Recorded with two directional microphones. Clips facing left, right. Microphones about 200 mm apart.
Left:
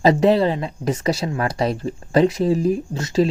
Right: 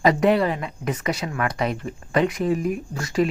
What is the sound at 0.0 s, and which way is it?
Speech, 30° left (ahead or behind).